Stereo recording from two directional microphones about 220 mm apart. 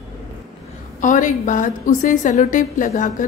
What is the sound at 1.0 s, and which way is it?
Speech, 35° left (ahead or behind).